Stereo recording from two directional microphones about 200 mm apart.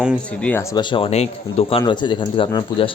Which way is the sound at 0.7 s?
25° left (ahead or behind).